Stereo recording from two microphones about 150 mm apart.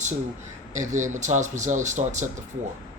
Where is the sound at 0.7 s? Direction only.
55° right (ahead or behind).